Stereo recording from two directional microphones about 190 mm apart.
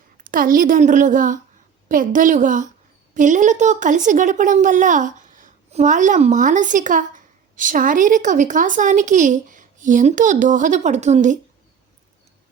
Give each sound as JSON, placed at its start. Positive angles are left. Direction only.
{"t": 0.2, "sound": "a woman's voice", "side_deg": -45}